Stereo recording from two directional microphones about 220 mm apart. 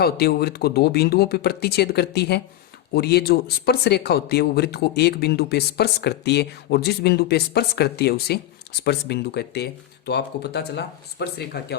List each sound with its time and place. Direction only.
0.0 s speech: 45° left (ahead or behind)